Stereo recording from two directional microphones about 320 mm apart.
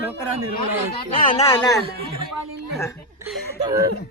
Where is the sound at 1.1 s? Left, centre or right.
Centre.